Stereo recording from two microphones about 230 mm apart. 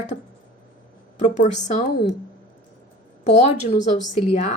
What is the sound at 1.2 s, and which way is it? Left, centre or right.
Speech, left.